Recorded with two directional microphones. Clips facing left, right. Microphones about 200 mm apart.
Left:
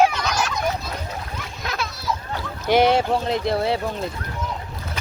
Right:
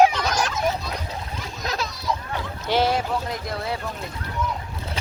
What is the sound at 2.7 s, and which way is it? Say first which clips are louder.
Speech: left 5 dB; 20° left (ahead or behind).